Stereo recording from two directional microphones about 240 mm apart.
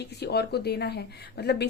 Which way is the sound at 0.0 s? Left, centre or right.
Left.